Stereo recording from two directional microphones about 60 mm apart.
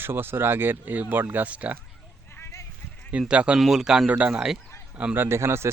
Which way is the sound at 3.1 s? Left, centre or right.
Centre.